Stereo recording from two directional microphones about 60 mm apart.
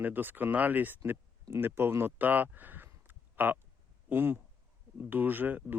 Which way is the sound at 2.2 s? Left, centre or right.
Right.